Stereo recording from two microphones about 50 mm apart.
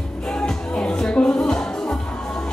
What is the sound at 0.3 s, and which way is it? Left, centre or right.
Music, left.